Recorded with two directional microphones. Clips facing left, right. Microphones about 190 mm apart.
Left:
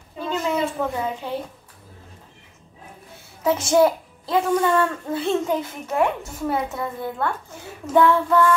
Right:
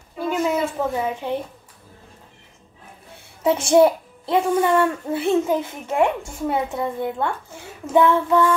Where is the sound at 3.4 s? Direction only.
30° right (ahead or behind).